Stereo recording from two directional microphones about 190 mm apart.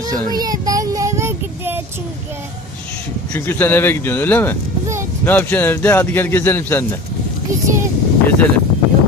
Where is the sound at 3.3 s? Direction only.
10° left (ahead or behind).